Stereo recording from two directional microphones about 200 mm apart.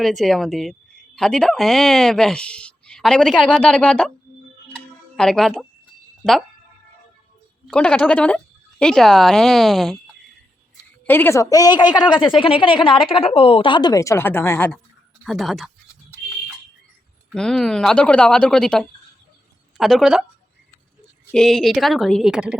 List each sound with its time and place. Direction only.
0.0 s a woman's voice: centre (ahead or behind)
4.7 s tick-tock: 5° left (ahead or behind)
7.7 s a woman's voice: 5° left (ahead or behind)
11.0 s a woman's voice: 10° left (ahead or behind)
15.2 s a sound: centre (ahead or behind)
17.2 s a woman's voice: 5° left (ahead or behind)
21.2 s a woman's voice: centre (ahead or behind)